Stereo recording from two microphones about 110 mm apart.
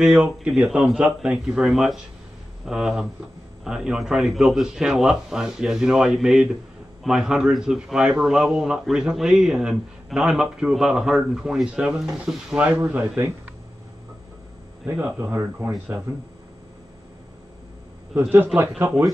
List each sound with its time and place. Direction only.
0.0 s a man's voice: 5° right (ahead or behind)
14.9 s speech: 20° right (ahead or behind)
18.3 s speech: 20° right (ahead or behind)